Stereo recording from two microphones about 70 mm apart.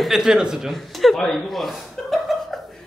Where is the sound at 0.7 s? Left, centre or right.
Centre.